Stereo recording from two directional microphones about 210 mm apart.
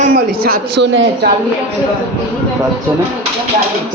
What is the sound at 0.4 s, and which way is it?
Speech, 50° right (ahead or behind).